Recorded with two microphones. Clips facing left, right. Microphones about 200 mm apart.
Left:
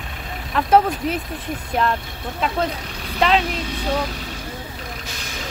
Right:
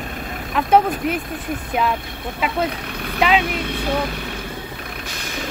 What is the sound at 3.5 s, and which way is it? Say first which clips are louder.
Speech: right 1 dB; 60° right (ahead or behind).